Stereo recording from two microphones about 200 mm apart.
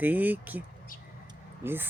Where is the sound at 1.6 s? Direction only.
10° right (ahead or behind).